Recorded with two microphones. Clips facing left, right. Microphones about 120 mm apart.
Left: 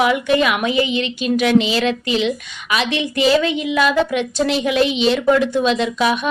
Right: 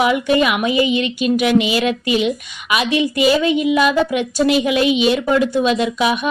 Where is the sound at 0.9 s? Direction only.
50° right (ahead or behind).